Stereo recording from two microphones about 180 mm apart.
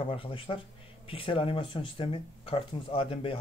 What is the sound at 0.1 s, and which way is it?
Speech, 30° left (ahead or behind).